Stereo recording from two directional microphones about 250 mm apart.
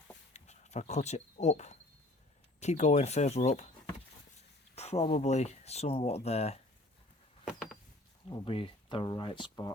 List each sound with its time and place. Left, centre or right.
0.3 s speech: left
7.4 s a sound: centre
8.3 s speech: centre